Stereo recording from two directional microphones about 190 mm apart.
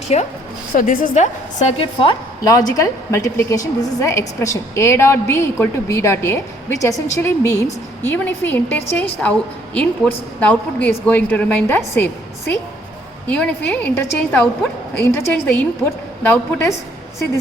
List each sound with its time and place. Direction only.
0.1 s a woman's voice: 35° left (ahead or behind)
0.7 s a woman's voice: 45° left (ahead or behind); by 12.1 s 10° left (ahead or behind)
13.2 s a woman's voice: 5° left (ahead or behind)